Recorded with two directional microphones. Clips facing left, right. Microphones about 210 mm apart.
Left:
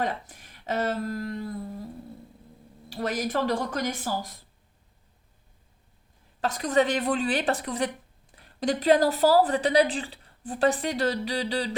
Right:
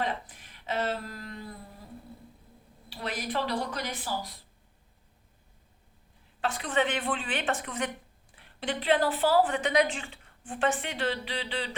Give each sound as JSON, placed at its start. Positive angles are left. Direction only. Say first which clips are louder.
{"t": 0.0, "sound": "speech", "louder": "left 3 dB", "side_deg": 45}
{"t": 2.9, "sound": "a woman's voice", "louder": "left 5 dB", "side_deg": 45}
{"t": 6.4, "sound": "a woman's voice", "louder": "left 5 dB", "side_deg": 40}